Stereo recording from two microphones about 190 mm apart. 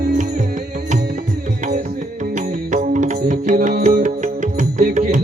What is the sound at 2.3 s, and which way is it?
Music, 40° right (ahead or behind).